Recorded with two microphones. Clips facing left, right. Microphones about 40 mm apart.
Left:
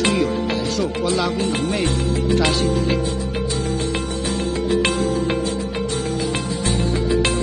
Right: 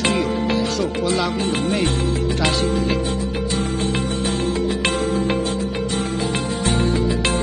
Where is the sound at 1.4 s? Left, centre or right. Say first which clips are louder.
Even; right.